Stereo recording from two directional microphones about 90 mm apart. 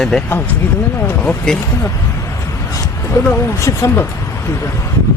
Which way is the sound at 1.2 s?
10° left (ahead or behind).